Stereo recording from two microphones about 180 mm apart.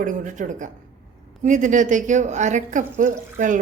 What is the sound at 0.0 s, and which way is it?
A woman's voice, 45° right (ahead or behind).